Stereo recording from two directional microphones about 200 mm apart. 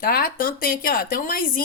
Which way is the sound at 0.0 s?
50° left (ahead or behind).